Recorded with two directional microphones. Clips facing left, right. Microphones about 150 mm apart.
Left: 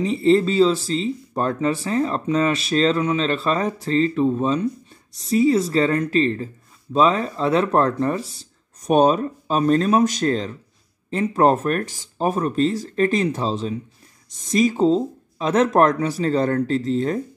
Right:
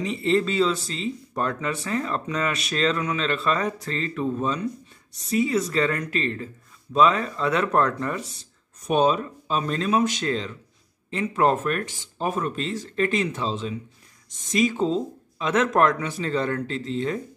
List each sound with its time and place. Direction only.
0.0 s speech: 35° left (ahead or behind)